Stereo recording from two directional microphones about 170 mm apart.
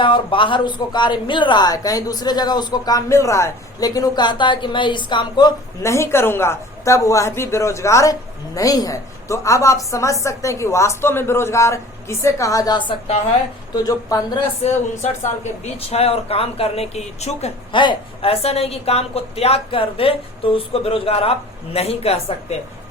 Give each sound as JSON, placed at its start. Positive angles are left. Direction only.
{"t": 0.0, "sound": "a woman's voice", "side_deg": 30}
{"t": 14.6, "sound": "speech", "side_deg": 40}